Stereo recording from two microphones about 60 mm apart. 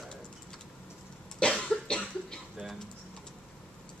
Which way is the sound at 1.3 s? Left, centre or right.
Centre.